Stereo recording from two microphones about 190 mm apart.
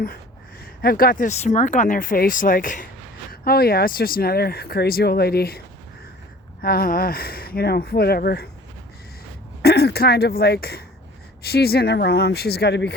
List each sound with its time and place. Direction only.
0.6 s speech: 50° left (ahead or behind)
9.6 s speech: 60° left (ahead or behind)